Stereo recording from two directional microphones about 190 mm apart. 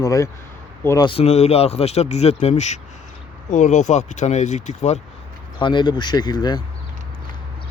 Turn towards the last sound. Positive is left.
turn(degrees=20)  # may be behind; listen again after turning